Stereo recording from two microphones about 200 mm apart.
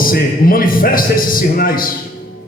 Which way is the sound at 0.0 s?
45° left (ahead or behind).